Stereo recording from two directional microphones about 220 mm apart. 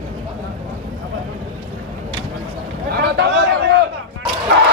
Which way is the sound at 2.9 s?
50° right (ahead or behind).